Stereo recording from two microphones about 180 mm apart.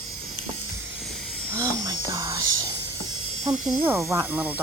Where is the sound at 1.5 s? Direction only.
20° right (ahead or behind).